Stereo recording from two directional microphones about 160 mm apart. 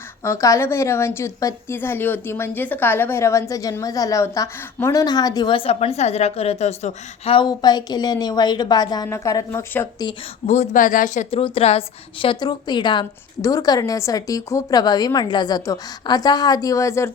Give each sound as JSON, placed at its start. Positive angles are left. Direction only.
{"t": 0.2, "sound": "a woman's voice", "side_deg": 20}
{"t": 10.4, "sound": "a woman's voice", "side_deg": 45}